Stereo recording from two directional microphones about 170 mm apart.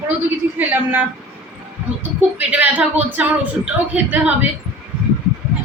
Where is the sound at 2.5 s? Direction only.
10° right (ahead or behind).